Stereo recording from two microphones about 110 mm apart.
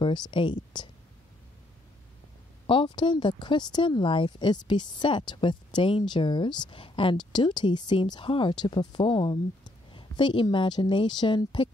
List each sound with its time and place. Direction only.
0.0 s speech: 45° left (ahead or behind)
2.6 s speech: 50° left (ahead or behind)